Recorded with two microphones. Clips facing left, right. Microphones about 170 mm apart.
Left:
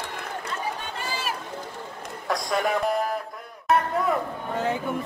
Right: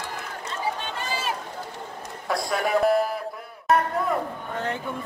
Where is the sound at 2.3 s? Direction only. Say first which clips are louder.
Even; 5° right (ahead or behind).